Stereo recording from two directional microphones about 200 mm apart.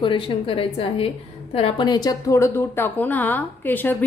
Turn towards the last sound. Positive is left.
turn(degrees=10)  # may be behind; listen again after turning